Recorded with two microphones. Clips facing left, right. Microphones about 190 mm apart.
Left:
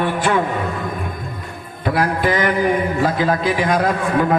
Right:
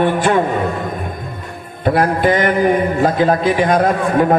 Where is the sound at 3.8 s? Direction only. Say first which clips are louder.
Right 4 dB; 35° right (ahead or behind).